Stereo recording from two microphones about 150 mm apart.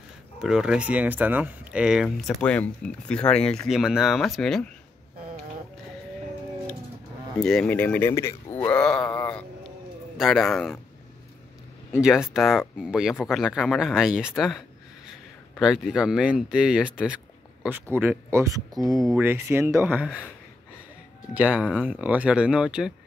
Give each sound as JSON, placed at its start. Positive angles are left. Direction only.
{"t": 0.4, "sound": "speech", "side_deg": -5}
{"t": 7.3, "sound": "speech", "side_deg": 5}
{"t": 11.9, "sound": "speech", "side_deg": -5}
{"t": 15.6, "sound": "speech", "side_deg": -5}
{"t": 21.3, "sound": "speech", "side_deg": -10}